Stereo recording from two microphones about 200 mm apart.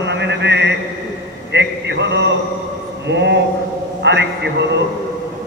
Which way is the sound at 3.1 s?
60° right (ahead or behind).